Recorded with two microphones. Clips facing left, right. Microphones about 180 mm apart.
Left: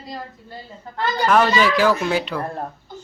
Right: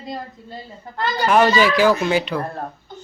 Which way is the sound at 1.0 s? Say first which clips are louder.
Right 1 dB; 5° right (ahead or behind).